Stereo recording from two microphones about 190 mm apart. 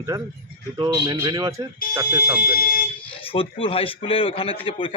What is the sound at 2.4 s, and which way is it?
Speech, 50° left (ahead or behind).